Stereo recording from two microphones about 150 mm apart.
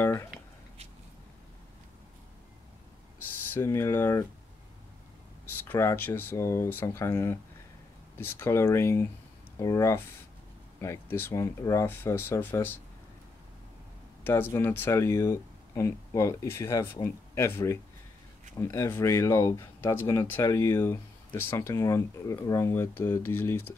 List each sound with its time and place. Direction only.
0.0 s a sound: 20° left (ahead or behind)
3.4 s speech: 15° left (ahead or behind)
5.4 s speech: 15° left (ahead or behind)
14.2 s speech: 15° left (ahead or behind)